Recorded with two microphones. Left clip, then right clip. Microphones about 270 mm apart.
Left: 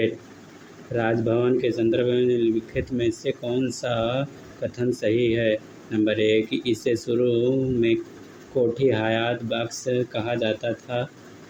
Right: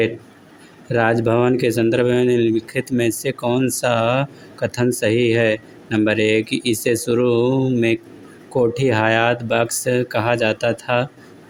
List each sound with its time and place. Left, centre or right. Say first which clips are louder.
0.9 s speech: right 6 dB; right